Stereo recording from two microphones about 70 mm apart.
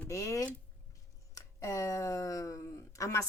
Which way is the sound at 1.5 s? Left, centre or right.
Left.